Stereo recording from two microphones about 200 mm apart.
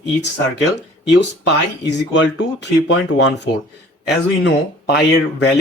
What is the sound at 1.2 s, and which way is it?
Speech, 60° left (ahead or behind).